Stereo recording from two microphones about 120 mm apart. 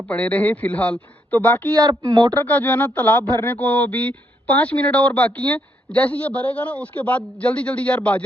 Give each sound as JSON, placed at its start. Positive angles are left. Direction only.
{"t": 0.1, "sound": "speech", "side_deg": 10}
{"t": 1.7, "sound": "speech", "side_deg": -25}
{"t": 2.4, "sound": "speech", "side_deg": 15}